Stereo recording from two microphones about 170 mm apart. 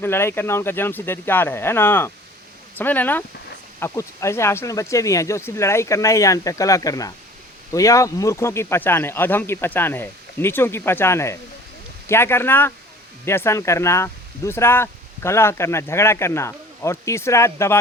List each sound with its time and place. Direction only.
0.0 s speech: 15° left (ahead or behind)